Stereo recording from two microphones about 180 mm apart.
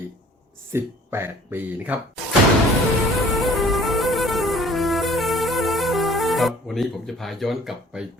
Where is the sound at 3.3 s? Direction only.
Centre (ahead or behind).